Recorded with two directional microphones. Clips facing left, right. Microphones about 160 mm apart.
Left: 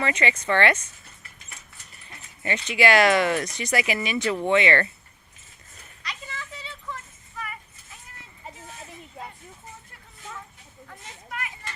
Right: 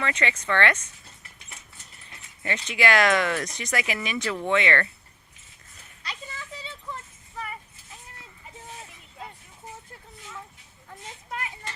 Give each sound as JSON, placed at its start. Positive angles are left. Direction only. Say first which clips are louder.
{"t": 0.0, "sound": "speech", "louder": "left 3 dB", "side_deg": 10}
{"t": 2.4, "sound": "speech", "louder": "left 3 dB", "side_deg": 5}
{"t": 6.0, "sound": "a sound", "louder": "left 1 dB", "side_deg": -30}
{"t": 10.8, "sound": "children playing", "louder": "right 2 dB", "side_deg": -25}